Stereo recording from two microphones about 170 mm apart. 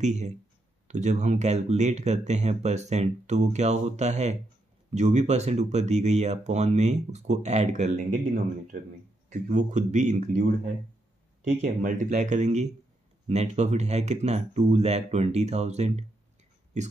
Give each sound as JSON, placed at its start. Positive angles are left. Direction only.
{"t": 0.0, "sound": "speech", "side_deg": -45}
{"t": 9.3, "sound": "speech", "side_deg": -45}
{"t": 11.4, "sound": "speech", "side_deg": -45}